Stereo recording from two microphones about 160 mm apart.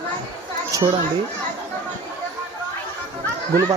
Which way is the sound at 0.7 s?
20° right (ahead or behind).